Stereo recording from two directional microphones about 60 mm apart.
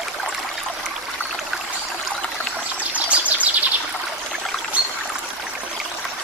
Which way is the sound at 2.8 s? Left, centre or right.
Right.